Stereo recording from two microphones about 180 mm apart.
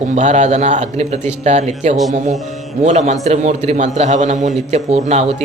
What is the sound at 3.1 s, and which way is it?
A man's voice, 40° right (ahead or behind).